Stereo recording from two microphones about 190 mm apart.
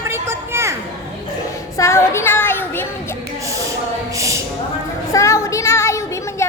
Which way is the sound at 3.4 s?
15° right (ahead or behind).